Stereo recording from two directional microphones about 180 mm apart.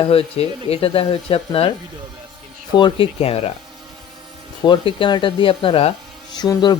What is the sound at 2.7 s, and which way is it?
Speech, 25° left (ahead or behind).